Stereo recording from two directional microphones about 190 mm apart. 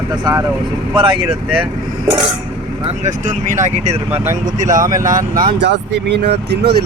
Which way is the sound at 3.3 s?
40° right (ahead or behind).